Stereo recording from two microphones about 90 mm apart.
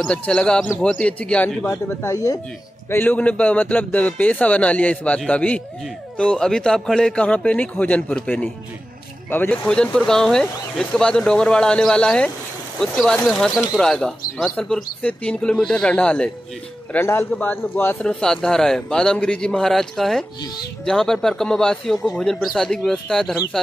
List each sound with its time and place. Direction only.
0.0 s a man's voice: 10° left (ahead or behind)
1.7 s speech: 35° left (ahead or behind)
2.9 s a man's voice: 20° left (ahead or behind)
9.7 s a man's voice: 10° left (ahead or behind)
16.9 s speech: 25° left (ahead or behind)
18.0 s a man's voice: 5° left (ahead or behind)